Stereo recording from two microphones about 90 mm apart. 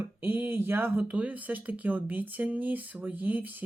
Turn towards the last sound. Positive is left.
turn(degrees=-20)  # may be behind; listen again after turning